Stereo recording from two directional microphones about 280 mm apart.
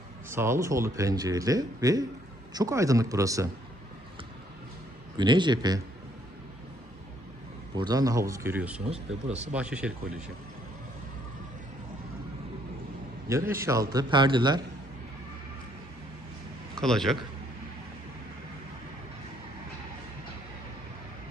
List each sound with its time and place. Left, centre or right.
0.3 s speech: centre
5.1 s speech: centre
7.8 s speech: centre
8.9 s speech: right
9.5 s speech: centre
13.5 s speech: centre
16.8 s speech: centre